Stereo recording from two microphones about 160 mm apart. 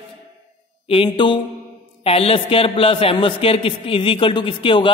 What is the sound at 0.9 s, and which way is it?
Speech, 30° left (ahead or behind).